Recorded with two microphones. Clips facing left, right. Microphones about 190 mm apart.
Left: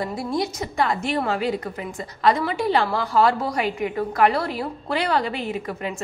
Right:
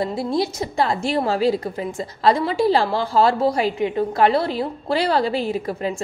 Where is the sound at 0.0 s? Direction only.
25° right (ahead or behind).